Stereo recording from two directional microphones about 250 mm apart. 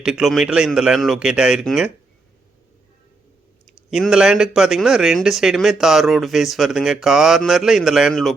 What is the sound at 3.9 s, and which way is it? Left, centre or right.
A man's voice, centre.